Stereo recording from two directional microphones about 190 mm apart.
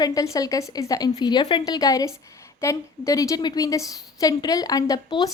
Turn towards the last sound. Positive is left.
turn(degrees=20)  # may be behind; listen again after turning